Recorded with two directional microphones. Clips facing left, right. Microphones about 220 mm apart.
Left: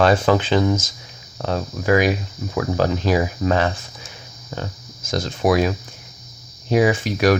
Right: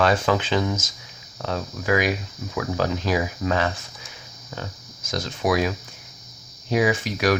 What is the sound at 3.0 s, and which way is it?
Speech, 30° left (ahead or behind).